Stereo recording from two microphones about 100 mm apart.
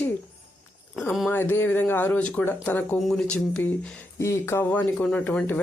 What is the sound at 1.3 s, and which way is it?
Speech, 20° left (ahead or behind).